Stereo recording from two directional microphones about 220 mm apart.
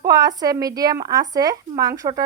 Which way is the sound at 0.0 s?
15° right (ahead or behind).